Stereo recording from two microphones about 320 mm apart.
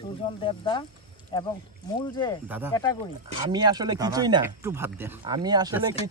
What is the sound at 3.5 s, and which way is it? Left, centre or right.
Speech, centre.